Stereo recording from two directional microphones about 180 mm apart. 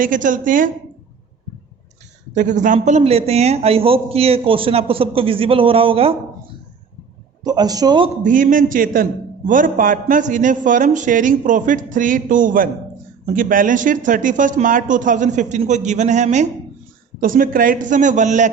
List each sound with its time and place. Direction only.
0.0 s speech: 45° right (ahead or behind)
2.3 s a man's voice: 45° right (ahead or behind)
7.4 s a man's voice: 20° right (ahead or behind)
8.2 s speech: 50° right (ahead or behind)